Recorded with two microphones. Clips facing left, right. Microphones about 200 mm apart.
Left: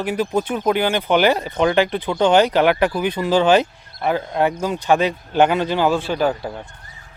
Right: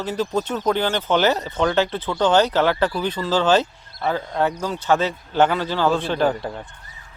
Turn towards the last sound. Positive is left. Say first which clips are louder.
# even
turn(degrees=5)  # may be behind; listen again after turning